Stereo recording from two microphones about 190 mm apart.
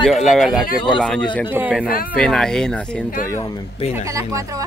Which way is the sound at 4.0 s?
15° right (ahead or behind).